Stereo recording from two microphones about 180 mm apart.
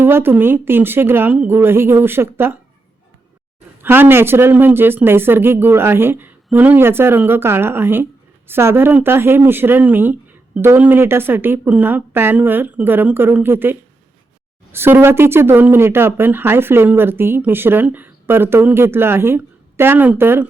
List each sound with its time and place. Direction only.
0.0 s speech: 10° right (ahead or behind)
3.8 s speech: 10° right (ahead or behind)